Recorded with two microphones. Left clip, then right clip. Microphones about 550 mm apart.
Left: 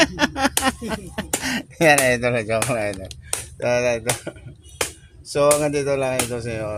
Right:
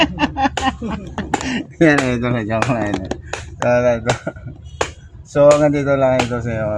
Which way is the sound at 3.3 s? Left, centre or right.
Left.